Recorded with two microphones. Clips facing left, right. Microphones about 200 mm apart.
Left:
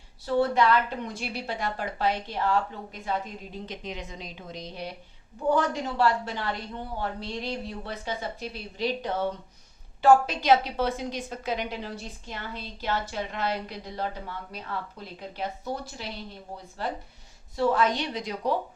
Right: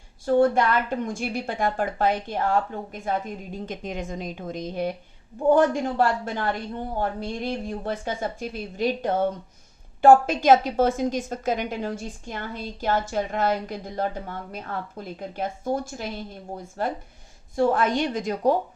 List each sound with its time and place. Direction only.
0.3 s a woman's voice: 50° right (ahead or behind)